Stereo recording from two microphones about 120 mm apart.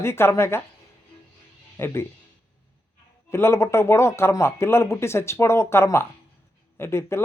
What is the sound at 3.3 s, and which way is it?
Speech, 20° left (ahead or behind).